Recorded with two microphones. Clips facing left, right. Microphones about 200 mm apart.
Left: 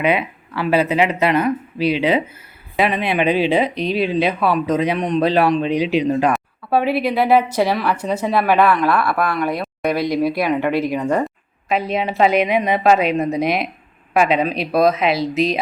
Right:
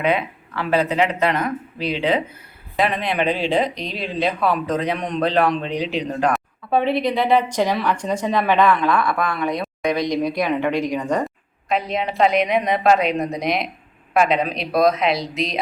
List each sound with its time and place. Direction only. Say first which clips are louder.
0.0 s a man's voice: left 2 dB; 10° left (ahead or behind)
3.8 s speech: left 9 dB; 60° left (ahead or behind)
4.0 s a man's voice: left 1 dB; 5° left (ahead or behind)